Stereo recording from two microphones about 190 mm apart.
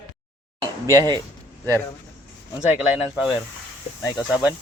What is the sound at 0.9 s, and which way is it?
Speech, 20° right (ahead or behind).